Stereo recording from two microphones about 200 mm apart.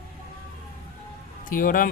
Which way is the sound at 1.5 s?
45° left (ahead or behind).